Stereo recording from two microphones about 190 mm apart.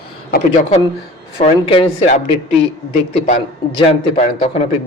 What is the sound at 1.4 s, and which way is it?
Speech, 30° left (ahead or behind).